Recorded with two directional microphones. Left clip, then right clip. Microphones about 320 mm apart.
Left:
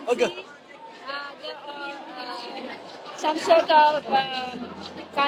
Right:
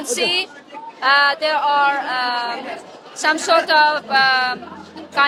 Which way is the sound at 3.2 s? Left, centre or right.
Right.